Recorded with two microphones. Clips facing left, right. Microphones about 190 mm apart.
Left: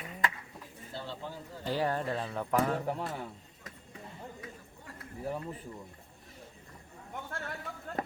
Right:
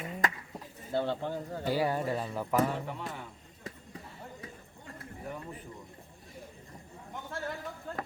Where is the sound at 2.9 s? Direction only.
40° left (ahead or behind).